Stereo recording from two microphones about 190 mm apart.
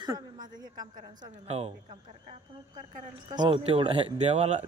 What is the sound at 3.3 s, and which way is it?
Speech, 25° right (ahead or behind).